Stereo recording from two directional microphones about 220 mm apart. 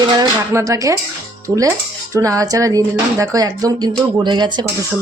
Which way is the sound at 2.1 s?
15° right (ahead or behind).